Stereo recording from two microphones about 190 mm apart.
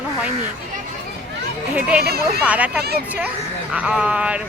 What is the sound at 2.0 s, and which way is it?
Speech, 55° right (ahead or behind).